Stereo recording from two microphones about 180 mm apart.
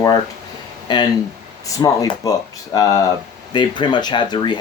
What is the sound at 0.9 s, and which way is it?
Speech, 25° left (ahead or behind).